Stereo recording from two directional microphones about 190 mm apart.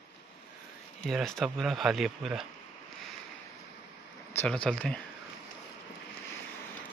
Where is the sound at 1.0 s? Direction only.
5° left (ahead or behind).